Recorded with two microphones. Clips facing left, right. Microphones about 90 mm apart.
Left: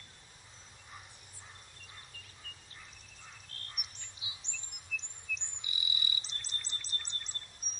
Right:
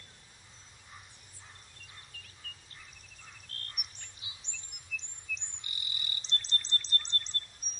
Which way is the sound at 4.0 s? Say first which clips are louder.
Left 1 dB; 50° right (ahead or behind).